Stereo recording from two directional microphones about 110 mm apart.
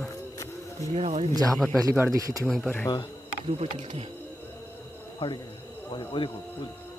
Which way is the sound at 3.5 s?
70° right (ahead or behind).